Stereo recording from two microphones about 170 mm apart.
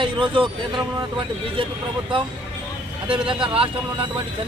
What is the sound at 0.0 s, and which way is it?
A man's voice, 30° right (ahead or behind).